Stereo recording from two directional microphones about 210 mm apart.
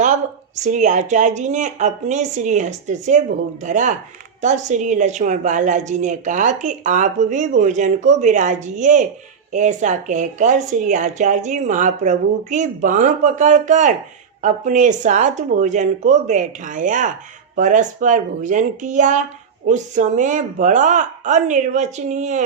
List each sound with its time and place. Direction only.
0.6 s a woman's voice: 35° right (ahead or behind)